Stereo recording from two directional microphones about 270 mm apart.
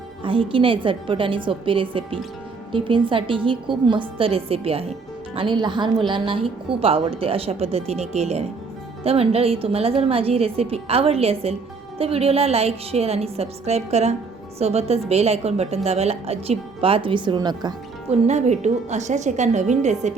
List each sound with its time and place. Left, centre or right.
0.2 s a woman's voice: centre